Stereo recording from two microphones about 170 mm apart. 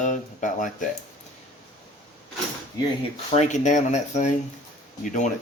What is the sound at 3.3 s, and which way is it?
Speech, 40° left (ahead or behind).